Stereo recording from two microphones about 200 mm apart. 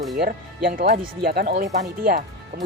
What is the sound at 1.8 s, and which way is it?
Speech, 40° right (ahead or behind).